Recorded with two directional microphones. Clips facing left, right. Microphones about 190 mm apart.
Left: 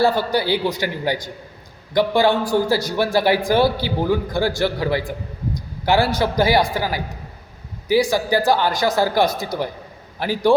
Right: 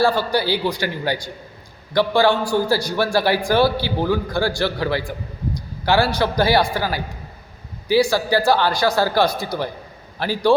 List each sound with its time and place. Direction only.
0.0 s a man's voice: 20° left (ahead or behind)
5.5 s a sound: 20° left (ahead or behind)
6.1 s a man's voice: 20° left (ahead or behind)